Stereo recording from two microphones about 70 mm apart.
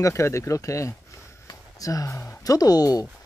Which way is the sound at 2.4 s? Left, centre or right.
Left.